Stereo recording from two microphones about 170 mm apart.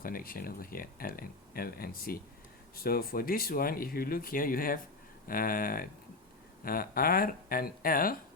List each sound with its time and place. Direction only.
0.0 s speech: 55° left (ahead or behind)